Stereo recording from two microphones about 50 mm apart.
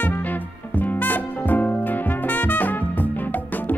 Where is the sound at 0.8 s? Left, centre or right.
Left.